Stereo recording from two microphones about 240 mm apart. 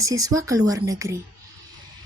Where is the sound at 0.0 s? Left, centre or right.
Centre.